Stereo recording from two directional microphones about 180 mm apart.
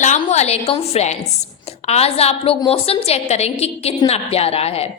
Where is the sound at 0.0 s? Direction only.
40° left (ahead or behind).